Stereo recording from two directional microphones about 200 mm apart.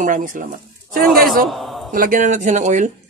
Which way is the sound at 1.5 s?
Centre (ahead or behind).